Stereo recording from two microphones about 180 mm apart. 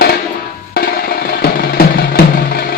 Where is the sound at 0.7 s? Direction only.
55° left (ahead or behind).